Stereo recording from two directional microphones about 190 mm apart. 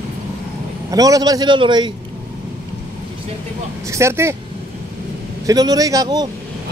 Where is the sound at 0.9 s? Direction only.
20° right (ahead or behind).